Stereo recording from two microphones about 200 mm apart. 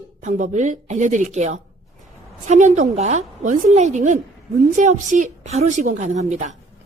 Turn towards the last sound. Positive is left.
turn(degrees=-35)  # may be behind; listen again after turning